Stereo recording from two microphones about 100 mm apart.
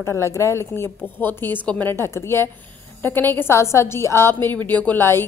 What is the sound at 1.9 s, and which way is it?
A woman's voice, 25° left (ahead or behind).